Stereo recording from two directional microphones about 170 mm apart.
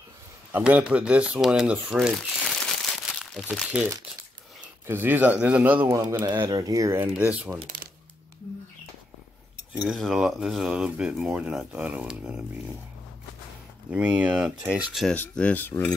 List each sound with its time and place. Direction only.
0.5 s speech: 10° right (ahead or behind)
9.8 s speech: centre (ahead or behind)
13.8 s speech: 5° right (ahead or behind)
15.1 s speech: 10° left (ahead or behind)